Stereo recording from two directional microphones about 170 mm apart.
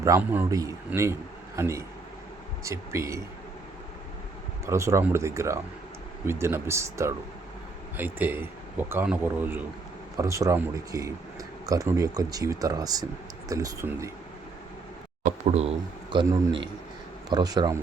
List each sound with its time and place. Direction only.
0.0 s a man's voice: 15° right (ahead or behind)
4.6 s a man's voice: 15° right (ahead or behind)
15.4 s speech: 35° right (ahead or behind)
16.1 s speech: 25° right (ahead or behind)